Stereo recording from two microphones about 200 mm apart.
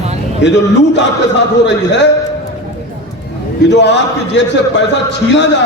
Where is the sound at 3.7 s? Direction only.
60° left (ahead or behind).